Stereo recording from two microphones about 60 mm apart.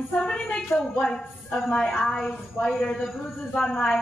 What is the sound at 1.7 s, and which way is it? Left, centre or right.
A woman's voice, centre.